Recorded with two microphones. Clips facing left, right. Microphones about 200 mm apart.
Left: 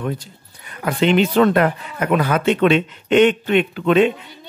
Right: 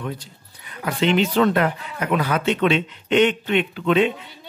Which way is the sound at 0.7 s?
55° left (ahead or behind).